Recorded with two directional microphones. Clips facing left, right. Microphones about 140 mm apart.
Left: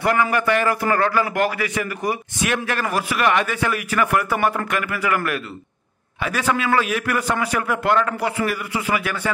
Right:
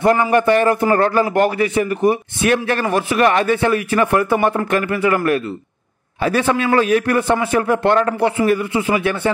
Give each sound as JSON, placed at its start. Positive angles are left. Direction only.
{"t": 0.0, "sound": "a man's voice", "side_deg": -30}